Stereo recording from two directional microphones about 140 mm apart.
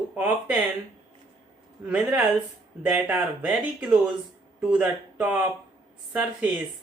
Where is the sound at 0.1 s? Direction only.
10° right (ahead or behind).